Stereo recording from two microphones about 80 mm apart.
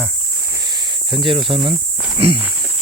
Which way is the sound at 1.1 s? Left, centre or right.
Right.